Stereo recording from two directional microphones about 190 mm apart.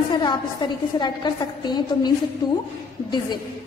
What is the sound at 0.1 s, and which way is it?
A woman's voice, 25° left (ahead or behind).